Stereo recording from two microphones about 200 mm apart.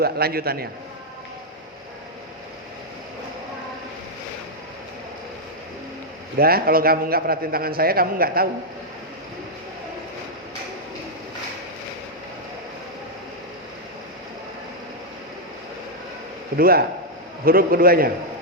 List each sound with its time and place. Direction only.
0.0 s a man's voice: 50° right (ahead or behind)
6.4 s a man's voice: 50° right (ahead or behind)
16.6 s a man's voice: 50° right (ahead or behind)